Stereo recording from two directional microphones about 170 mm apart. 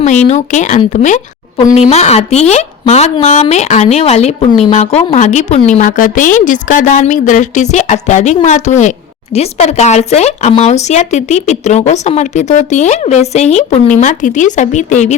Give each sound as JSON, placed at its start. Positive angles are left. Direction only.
{"t": 0.0, "sound": "a woman's voice", "side_deg": 40}